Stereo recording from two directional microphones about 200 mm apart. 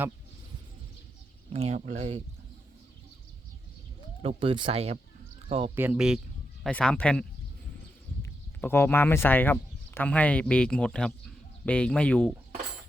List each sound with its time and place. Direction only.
1.5 s speech: 30° right (ahead or behind)
4.2 s speech: 25° right (ahead or behind)
5.7 s speech: 10° right (ahead or behind)